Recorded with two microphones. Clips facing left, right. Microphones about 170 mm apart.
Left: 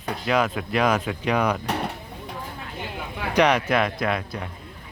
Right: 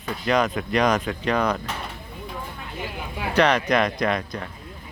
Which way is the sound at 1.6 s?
65° left (ahead or behind).